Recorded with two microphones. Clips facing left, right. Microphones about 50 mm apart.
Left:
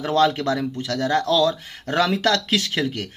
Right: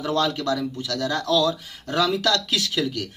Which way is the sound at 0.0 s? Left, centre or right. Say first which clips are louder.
Left 4 dB; left.